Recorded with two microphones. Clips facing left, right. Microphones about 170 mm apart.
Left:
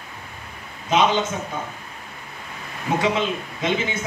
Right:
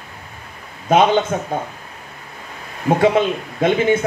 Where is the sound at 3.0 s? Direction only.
55° right (ahead or behind).